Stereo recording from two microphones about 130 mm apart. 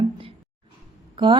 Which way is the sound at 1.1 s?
40° right (ahead or behind).